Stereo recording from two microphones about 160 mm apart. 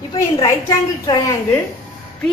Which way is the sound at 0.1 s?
30° left (ahead or behind).